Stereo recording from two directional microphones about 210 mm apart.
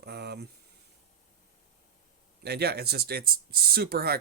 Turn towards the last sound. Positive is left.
turn(degrees=-45)  # may be behind; listen again after turning